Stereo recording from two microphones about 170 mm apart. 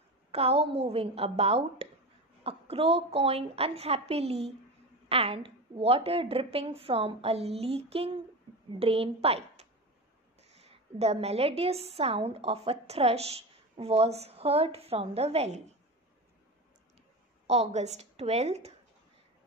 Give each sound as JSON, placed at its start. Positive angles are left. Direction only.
{"t": 0.3, "sound": "a woman's voice", "side_deg": -35}
{"t": 17.5, "sound": "a woman's voice", "side_deg": -40}